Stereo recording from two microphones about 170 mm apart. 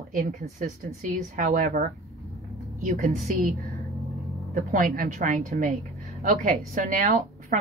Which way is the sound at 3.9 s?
Centre (ahead or behind).